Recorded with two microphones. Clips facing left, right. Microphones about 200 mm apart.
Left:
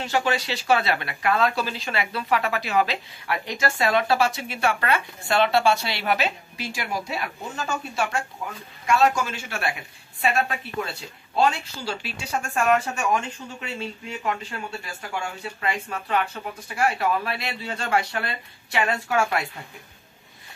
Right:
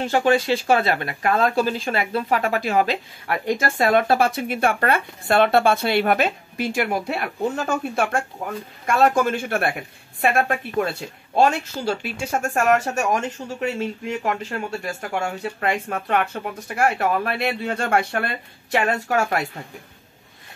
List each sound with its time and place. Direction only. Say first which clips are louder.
0.0 s speech: right 6 dB; 50° right (ahead or behind)